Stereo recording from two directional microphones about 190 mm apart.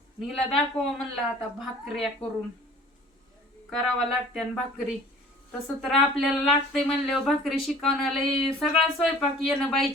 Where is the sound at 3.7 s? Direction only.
Centre (ahead or behind).